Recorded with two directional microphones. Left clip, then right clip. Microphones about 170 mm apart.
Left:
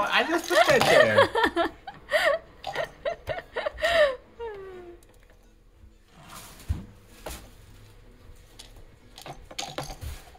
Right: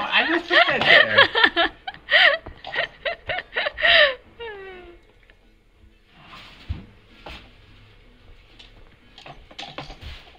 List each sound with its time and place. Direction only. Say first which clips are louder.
0.3 s chuckle: right 2 dB; 20° left (ahead or behind)
2.7 s snicker: right 5 dB; 20° left (ahead or behind)